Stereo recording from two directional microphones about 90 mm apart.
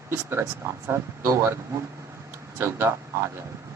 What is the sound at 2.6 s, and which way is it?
Speech, 30° right (ahead or behind).